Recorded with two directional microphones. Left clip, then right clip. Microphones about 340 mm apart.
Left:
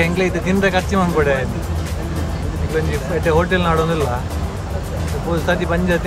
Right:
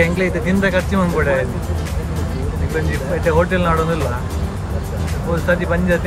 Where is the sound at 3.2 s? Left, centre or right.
Centre.